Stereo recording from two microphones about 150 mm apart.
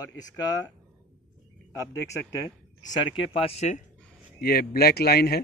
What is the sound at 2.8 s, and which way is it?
Speech, 35° left (ahead or behind).